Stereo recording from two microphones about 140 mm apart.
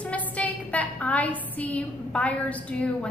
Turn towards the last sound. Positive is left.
turn(degrees=10)  # may be behind; listen again after turning